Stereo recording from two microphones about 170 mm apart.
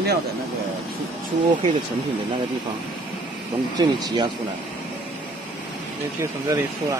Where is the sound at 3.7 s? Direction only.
25° right (ahead or behind).